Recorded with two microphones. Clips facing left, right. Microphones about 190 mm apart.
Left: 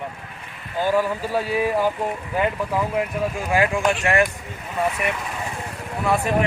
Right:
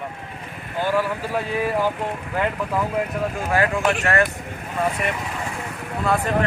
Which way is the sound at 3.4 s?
15° left (ahead or behind).